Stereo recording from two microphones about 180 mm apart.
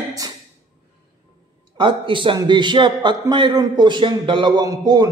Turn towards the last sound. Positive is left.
turn(degrees=-20)  # may be behind; listen again after turning